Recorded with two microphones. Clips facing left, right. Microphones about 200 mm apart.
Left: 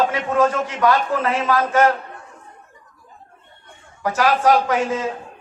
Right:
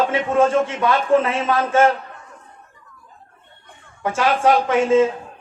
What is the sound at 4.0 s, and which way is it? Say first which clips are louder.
A man's voice: even; 25° right (ahead or behind).